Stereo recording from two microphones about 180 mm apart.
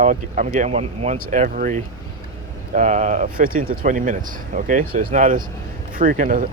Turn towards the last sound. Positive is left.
turn(degrees=-45)  # may be behind; listen again after turning